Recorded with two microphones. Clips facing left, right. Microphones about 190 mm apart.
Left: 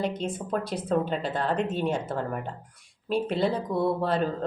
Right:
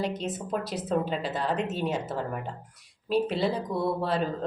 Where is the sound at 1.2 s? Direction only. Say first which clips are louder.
Left 2 dB; 50° left (ahead or behind).